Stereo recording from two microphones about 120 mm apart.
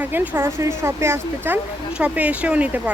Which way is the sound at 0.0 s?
15° right (ahead or behind).